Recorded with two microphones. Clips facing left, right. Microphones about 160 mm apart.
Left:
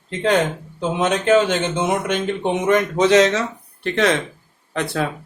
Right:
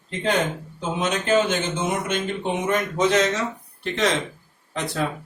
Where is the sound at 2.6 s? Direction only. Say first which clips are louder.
Left 6 dB; 80° left.